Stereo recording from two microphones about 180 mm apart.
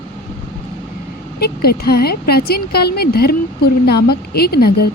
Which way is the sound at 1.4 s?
60° left (ahead or behind).